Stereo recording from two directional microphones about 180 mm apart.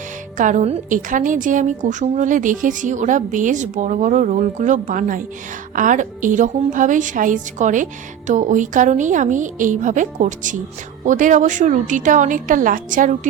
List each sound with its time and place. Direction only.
0.3 s a woman's voice: 45° right (ahead or behind)